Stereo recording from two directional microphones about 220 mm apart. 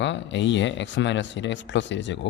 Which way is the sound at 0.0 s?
55° left (ahead or behind).